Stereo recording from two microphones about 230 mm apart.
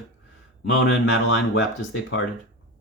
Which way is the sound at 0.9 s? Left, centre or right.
Left.